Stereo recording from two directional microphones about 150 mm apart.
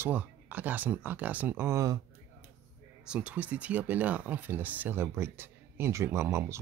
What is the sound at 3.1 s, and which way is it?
Speech, 10° right (ahead or behind).